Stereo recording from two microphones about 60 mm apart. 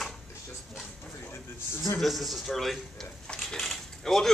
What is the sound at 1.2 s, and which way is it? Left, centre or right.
Speech, left.